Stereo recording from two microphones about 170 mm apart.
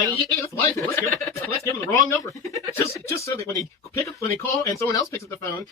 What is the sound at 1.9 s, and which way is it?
Speech, 15° left (ahead or behind).